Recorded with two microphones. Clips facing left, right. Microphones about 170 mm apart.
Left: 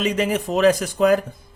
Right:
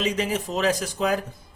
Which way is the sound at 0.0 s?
55° left (ahead or behind).